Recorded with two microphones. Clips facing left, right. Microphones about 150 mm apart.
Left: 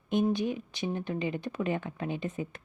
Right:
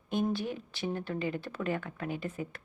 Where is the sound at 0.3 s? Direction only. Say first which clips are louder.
Left 4 dB; 20° left (ahead or behind).